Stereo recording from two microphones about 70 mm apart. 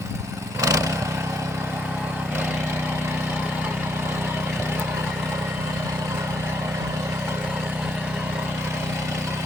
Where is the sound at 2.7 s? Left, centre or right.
Right.